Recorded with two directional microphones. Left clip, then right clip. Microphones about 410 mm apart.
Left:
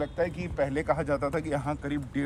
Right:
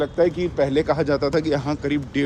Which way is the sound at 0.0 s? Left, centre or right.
Centre.